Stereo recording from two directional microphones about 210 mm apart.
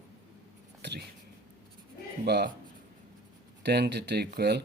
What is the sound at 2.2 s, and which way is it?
Speech, 50° right (ahead or behind).